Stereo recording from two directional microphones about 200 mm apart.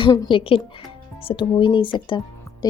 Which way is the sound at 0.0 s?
20° left (ahead or behind).